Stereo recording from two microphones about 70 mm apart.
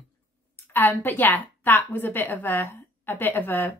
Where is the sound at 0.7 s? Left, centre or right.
Left.